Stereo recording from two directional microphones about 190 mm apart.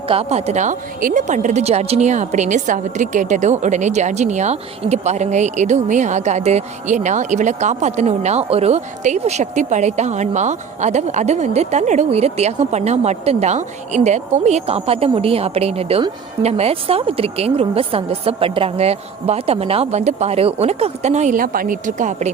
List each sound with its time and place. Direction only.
0.1 s speech: 35° right (ahead or behind)